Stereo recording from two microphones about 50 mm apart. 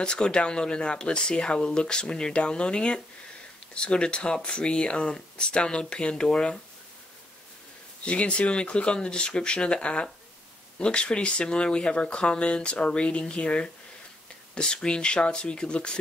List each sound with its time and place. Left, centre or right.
0.0 s speech: centre
8.0 s speech: left